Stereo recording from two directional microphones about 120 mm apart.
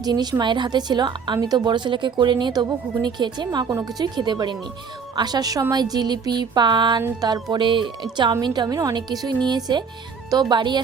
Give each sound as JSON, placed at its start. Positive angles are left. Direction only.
{"t": 0.0, "sound": "a woman's voice", "side_deg": -35}